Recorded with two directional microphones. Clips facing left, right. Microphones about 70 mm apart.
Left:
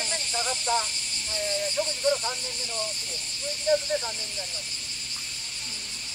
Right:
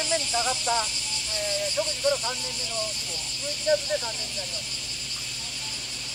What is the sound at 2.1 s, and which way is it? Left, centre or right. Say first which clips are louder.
Snake: right 1 dB; left.